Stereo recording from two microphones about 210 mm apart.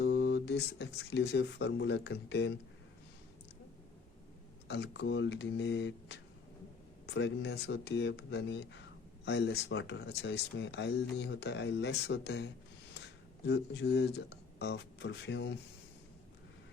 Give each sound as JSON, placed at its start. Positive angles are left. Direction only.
{"t": 0.0, "sound": "speech", "side_deg": 55}
{"t": 4.7, "sound": "speech", "side_deg": 55}